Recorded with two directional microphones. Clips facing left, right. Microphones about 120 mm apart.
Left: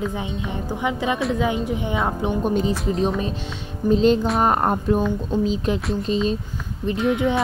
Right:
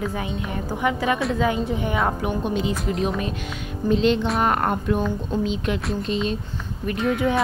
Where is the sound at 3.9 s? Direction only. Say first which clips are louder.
Left 3 dB; 40° left (ahead or behind).